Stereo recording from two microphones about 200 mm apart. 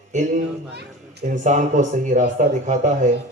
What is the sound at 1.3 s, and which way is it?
A man's voice, 40° right (ahead or behind).